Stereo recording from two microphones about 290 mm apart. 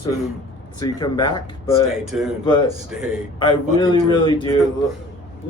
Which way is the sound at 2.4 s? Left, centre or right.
Centre.